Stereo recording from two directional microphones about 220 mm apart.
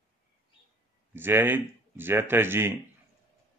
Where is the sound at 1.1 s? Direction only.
10° right (ahead or behind).